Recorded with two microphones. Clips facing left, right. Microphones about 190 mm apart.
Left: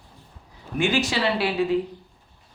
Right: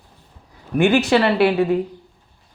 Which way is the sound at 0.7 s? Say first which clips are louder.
Right 8 dB; 60° right (ahead or behind).